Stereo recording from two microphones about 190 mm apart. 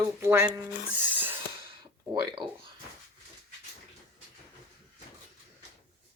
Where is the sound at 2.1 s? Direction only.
20° right (ahead or behind).